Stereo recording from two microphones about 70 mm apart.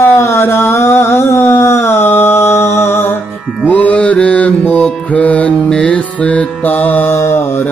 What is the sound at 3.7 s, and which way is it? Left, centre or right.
Mantra, centre.